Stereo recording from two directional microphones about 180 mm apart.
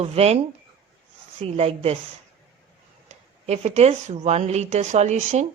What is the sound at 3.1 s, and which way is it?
A woman's voice, 40° right (ahead or behind).